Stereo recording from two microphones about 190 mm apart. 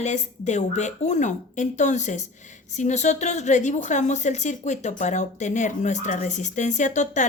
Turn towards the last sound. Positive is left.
turn(degrees=40)  # may be behind; listen again after turning